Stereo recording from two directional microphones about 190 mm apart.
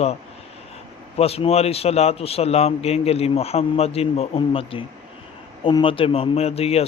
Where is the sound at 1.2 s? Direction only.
30° left (ahead or behind).